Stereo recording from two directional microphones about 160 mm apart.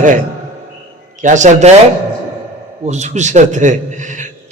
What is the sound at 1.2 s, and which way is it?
Speech, 50° right (ahead or behind).